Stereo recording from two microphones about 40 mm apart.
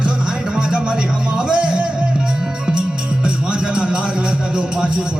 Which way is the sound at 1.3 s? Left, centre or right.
Right.